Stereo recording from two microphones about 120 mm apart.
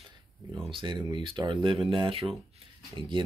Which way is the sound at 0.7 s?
40° right (ahead or behind).